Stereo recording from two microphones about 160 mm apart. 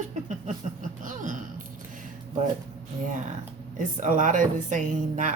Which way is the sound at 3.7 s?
55° right (ahead or behind).